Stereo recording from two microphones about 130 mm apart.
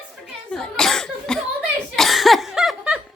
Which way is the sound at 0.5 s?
5° left (ahead or behind).